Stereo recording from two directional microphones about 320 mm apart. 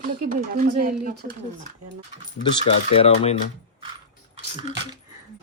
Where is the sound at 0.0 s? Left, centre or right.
Right.